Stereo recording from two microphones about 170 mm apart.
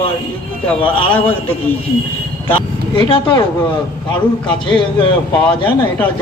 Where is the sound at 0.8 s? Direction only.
30° left (ahead or behind).